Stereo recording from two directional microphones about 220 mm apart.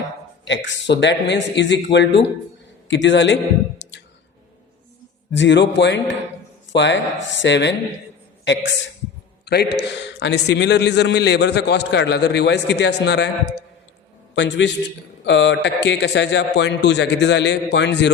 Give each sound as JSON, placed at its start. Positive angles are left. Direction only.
{"t": 0.4, "sound": "a man's voice", "side_deg": 55}
{"t": 5.3, "sound": "a man's voice", "side_deg": 55}
{"t": 14.3, "sound": "a man's voice", "side_deg": 55}